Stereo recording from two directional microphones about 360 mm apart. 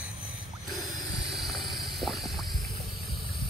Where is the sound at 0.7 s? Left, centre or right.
Centre.